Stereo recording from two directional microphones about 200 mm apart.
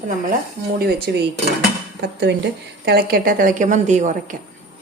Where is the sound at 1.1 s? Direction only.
55° right (ahead or behind); by 4.4 s 40° right (ahead or behind).